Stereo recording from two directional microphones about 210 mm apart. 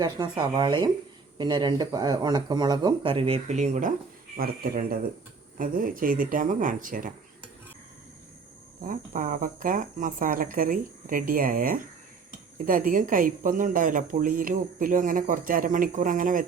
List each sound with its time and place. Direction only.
0.0 s speech: 20° right (ahead or behind); by 7.1 s 40° right (ahead or behind)
8.9 s speech: 40° right (ahead or behind)